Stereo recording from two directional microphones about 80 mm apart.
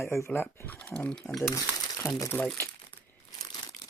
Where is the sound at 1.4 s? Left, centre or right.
Left.